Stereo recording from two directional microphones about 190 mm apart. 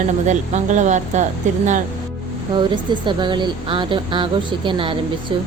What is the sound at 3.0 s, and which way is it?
Speech, 25° right (ahead or behind).